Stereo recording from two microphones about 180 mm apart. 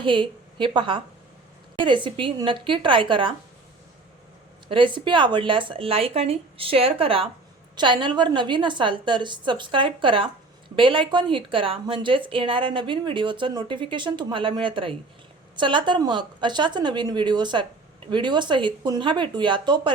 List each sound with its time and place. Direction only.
0.0 s a woman's voice: 25° right (ahead or behind)
4.7 s a woman's voice: 25° right (ahead or behind)